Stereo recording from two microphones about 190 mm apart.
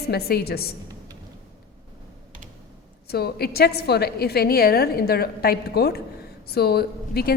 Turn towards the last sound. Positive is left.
turn(degrees=55)  # may be behind; listen again after turning